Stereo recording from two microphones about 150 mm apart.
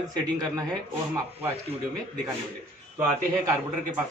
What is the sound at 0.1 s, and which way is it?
Speech, 25° right (ahead or behind).